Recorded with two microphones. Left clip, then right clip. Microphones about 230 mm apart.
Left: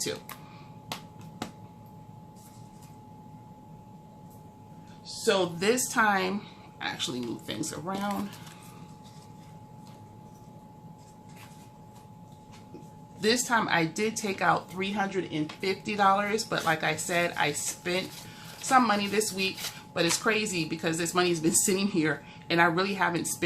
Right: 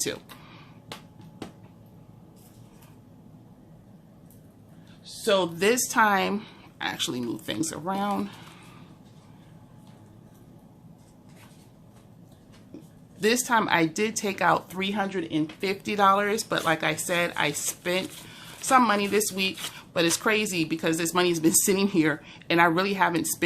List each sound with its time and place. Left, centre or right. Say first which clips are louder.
5.2 s speech: right 3 dB; right
13.1 s speech: right 3 dB; right